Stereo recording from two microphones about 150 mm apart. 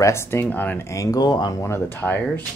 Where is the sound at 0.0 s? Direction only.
15° left (ahead or behind).